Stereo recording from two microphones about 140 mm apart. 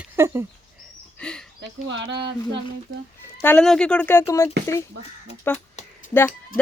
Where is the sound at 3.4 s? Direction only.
5° left (ahead or behind).